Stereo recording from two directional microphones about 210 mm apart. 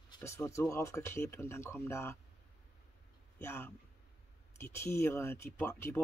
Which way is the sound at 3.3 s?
10° left (ahead or behind).